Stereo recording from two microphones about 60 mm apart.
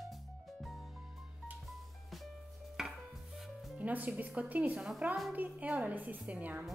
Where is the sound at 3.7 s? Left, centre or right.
Right.